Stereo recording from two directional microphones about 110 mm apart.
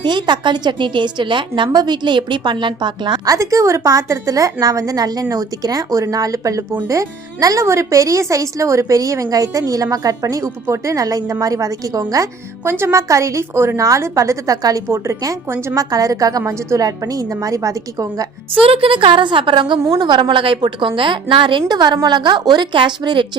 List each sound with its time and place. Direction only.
0.0 s a woman's voice: 45° right (ahead or behind)
3.3 s a woman's voice: 25° right (ahead or behind)
18.6 s a woman's voice: 55° right (ahead or behind)